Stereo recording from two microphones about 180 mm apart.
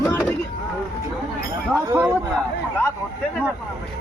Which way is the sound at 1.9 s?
15° right (ahead or behind).